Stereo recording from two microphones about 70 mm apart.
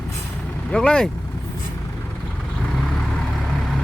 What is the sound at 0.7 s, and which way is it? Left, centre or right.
Speech, centre.